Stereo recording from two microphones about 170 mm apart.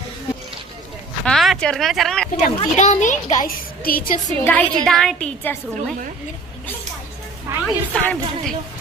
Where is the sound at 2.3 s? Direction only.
40° left (ahead or behind).